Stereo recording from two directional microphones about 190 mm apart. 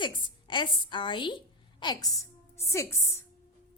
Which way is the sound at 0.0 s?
25° left (ahead or behind).